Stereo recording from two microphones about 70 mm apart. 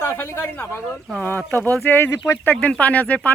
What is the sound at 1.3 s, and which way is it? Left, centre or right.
Speech, left.